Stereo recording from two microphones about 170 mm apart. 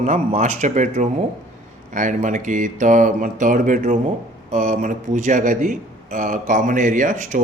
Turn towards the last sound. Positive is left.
turn(degrees=-50)  # may be behind; listen again after turning